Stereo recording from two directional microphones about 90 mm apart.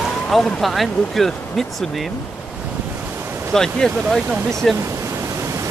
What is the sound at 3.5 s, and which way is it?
Speech, 5° left (ahead or behind).